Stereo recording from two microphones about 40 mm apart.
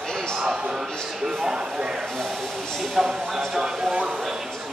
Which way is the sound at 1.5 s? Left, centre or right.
Right.